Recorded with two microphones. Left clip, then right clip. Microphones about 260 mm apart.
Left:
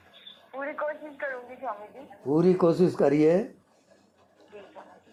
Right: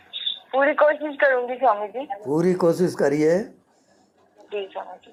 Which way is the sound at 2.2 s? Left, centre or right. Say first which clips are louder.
Right 2 dB; centre.